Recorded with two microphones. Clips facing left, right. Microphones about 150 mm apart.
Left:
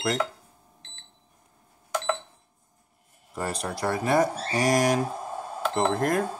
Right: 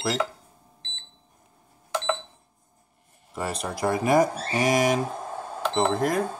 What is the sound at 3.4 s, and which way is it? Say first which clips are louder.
Speech: right 1 dB; 5° right (ahead or behind).